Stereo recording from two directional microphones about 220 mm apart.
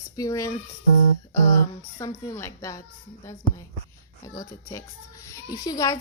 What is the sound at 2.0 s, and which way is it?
A woman's voice, 15° left (ahead or behind).